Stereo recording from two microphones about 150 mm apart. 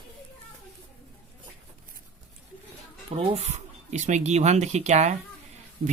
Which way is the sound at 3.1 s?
40° right (ahead or behind).